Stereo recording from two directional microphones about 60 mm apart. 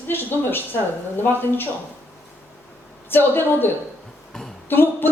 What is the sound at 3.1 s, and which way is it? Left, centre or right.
A woman's voice, left.